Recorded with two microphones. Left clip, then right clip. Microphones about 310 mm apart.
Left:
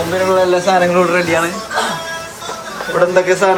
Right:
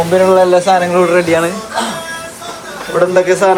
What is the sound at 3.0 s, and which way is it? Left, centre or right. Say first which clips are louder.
Speech: right 2 dB; centre.